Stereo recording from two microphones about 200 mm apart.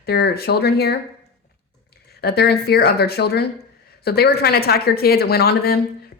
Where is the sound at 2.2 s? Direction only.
55° left (ahead or behind).